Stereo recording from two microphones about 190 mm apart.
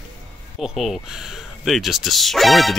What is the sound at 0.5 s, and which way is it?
Speech, centre (ahead or behind).